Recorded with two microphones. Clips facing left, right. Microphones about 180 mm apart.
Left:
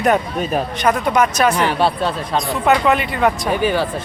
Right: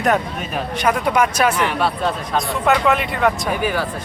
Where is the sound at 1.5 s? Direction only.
30° left (ahead or behind).